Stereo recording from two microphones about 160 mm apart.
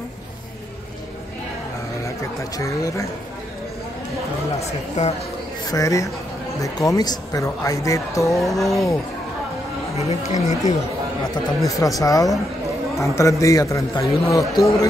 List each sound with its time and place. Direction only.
2.0 s chatter: 20° left (ahead or behind)
5.0 s speech: 45° left (ahead or behind)
5.7 s speech: 20° left (ahead or behind)
8.4 s speech: centre (ahead or behind)
10.3 s speech: 20° right (ahead or behind)
11.3 s speech: 20° left (ahead or behind)